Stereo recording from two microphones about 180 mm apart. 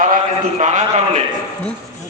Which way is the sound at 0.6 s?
40° right (ahead or behind).